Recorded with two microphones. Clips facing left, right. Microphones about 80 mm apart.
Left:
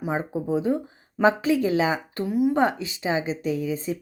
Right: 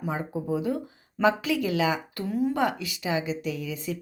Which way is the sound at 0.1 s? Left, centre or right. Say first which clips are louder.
Left 4 dB; left.